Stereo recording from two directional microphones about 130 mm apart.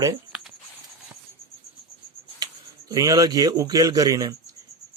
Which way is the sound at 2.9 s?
30° right (ahead or behind).